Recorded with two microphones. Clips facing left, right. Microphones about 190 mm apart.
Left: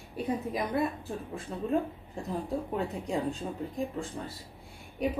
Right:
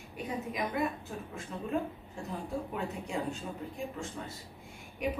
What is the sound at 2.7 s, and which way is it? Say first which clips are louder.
Speech: left 6 dB; 35° left (ahead or behind).